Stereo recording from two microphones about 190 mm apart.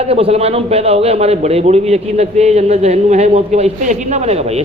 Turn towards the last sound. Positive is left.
turn(degrees=-35)  # may be behind; listen again after turning